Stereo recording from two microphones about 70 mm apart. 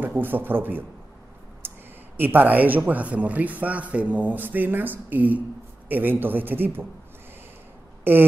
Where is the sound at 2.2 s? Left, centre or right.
Right.